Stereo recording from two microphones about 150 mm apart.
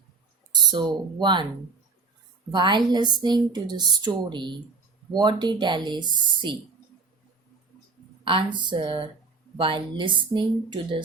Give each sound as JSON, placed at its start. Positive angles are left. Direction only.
{"t": 0.7, "sound": "speech", "side_deg": -30}
{"t": 2.5, "sound": "speech", "side_deg": -30}
{"t": 8.2, "sound": "speech", "side_deg": -35}